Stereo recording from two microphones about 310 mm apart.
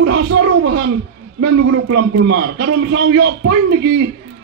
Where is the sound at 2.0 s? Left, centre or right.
Right.